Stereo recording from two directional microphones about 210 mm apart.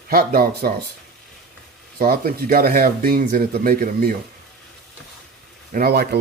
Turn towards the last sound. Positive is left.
turn(degrees=-50)  # may be behind; listen again after turning